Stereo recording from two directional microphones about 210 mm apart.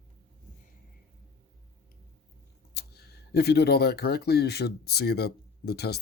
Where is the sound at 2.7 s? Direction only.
50° left (ahead or behind).